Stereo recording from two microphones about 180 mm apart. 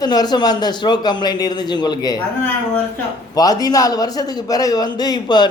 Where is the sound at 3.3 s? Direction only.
20° left (ahead or behind).